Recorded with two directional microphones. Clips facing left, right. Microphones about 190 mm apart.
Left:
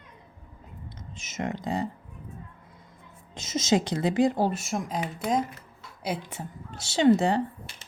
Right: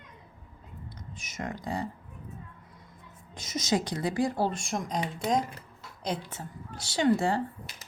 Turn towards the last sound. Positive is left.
turn(degrees=25)  # may be behind; listen again after turning